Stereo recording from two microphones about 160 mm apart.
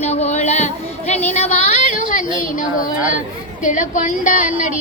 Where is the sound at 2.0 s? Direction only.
55° left (ahead or behind).